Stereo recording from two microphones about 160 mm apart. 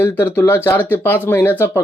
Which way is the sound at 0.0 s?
10° left (ahead or behind).